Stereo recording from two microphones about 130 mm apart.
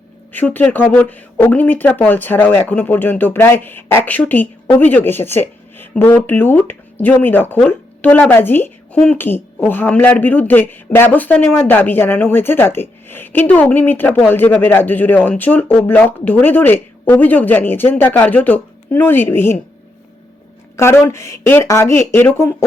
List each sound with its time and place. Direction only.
0.3 s speech: 15° left (ahead or behind)
20.7 s a woman's voice: 20° left (ahead or behind)